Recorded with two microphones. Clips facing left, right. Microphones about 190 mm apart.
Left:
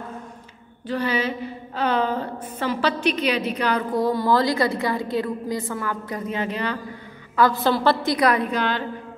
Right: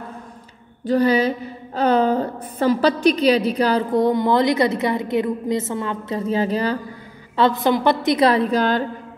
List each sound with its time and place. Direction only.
0.8 s a woman's voice: 40° right (ahead or behind)
4.0 s a woman's voice: 20° right (ahead or behind)
7.3 s a woman's voice: 20° right (ahead or behind); by 8.8 s 40° right (ahead or behind)